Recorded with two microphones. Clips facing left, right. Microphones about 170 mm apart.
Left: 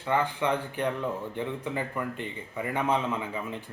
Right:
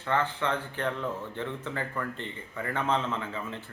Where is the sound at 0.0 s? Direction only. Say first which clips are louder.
Left 2 dB; 15° left (ahead or behind).